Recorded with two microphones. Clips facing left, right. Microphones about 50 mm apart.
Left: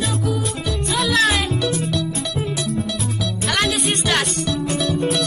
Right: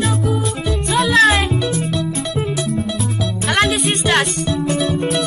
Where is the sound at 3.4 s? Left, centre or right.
Right.